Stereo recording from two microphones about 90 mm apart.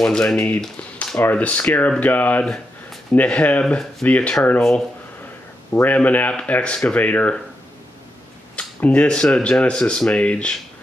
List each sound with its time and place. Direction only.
0.0 s speech: 5° left (ahead or behind)
2.4 s a sound: 5° left (ahead or behind)
3.2 s speech: 15° left (ahead or behind)
8.5 s speech: 15° left (ahead or behind)